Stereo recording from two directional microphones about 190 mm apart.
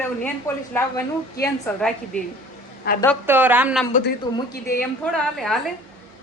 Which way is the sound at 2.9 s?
60° left (ahead or behind).